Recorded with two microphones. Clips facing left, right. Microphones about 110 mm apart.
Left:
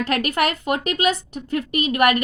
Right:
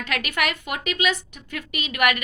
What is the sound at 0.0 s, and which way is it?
A woman's voice, 40° left (ahead or behind).